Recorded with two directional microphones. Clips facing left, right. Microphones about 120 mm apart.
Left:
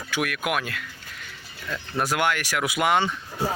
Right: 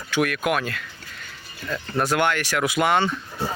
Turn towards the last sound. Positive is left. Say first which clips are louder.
# right 1 dB
turn(degrees=10)  # may be behind; listen again after turning